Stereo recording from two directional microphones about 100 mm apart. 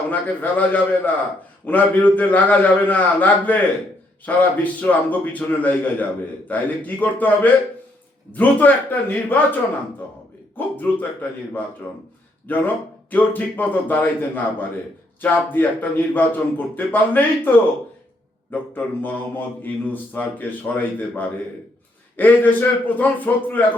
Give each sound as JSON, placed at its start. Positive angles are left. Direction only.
{"t": 0.1, "sound": "speech", "side_deg": 15}
{"t": 10.6, "sound": "speech", "side_deg": 20}
{"t": 18.5, "sound": "a man's voice", "side_deg": 20}